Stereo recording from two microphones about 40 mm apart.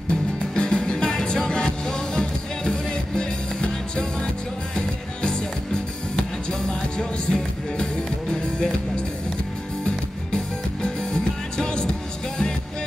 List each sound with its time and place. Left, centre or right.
0.1 s music: left